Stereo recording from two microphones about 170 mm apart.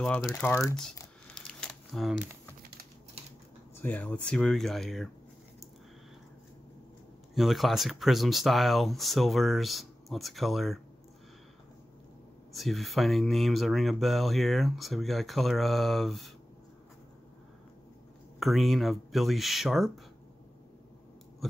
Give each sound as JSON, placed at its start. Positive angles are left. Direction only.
{"t": 0.0, "sound": "speech", "side_deg": 5}
{"t": 0.4, "sound": "speech", "side_deg": 15}
{"t": 1.3, "sound": "crumpling", "side_deg": 5}
{"t": 3.8, "sound": "speech", "side_deg": 10}
{"t": 7.3, "sound": "speech", "side_deg": 0}
{"t": 12.5, "sound": "speech", "side_deg": 0}
{"t": 18.4, "sound": "speech", "side_deg": 0}